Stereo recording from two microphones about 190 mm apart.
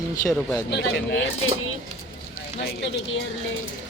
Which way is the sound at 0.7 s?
65° left (ahead or behind).